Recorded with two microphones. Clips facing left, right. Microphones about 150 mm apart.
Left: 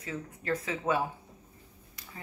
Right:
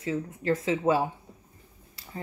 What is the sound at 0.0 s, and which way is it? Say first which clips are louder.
Speech: right 8 dB; 25° right (ahead or behind).